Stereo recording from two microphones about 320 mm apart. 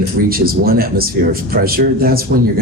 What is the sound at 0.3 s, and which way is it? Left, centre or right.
Speech, right.